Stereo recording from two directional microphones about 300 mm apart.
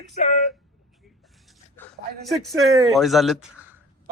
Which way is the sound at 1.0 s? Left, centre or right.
Centre.